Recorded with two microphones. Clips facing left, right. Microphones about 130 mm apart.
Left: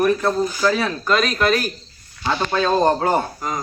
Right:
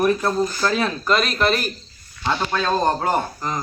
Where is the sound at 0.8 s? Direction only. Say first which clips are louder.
Left 1 dB; centre (ahead or behind).